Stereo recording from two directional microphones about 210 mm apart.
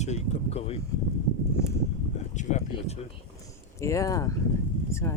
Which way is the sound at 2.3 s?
35° left (ahead or behind).